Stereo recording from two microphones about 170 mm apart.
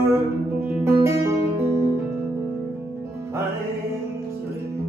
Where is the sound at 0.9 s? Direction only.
15° right (ahead or behind).